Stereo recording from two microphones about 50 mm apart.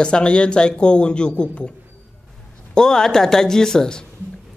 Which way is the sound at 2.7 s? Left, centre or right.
Centre.